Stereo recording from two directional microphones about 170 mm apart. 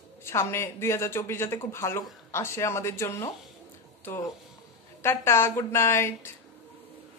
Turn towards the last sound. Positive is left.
turn(degrees=15)  # may be behind; listen again after turning